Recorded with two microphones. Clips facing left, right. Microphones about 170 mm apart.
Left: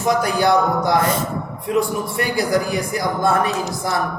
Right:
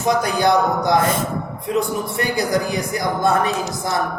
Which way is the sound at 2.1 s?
20° right (ahead or behind).